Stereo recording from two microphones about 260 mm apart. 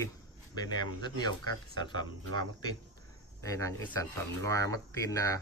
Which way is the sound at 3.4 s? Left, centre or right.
Centre.